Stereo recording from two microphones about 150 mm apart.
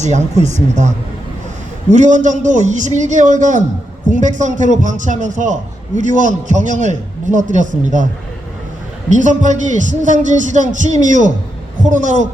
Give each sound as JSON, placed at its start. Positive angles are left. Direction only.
{"t": 0.0, "sound": "a man's voice", "side_deg": -50}
{"t": 9.0, "sound": "a man's voice", "side_deg": -55}